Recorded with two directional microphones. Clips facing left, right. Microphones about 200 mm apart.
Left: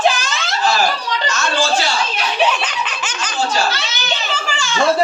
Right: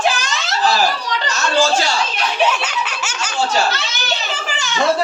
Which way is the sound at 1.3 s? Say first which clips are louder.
Right 3 dB; 40° right (ahead or behind).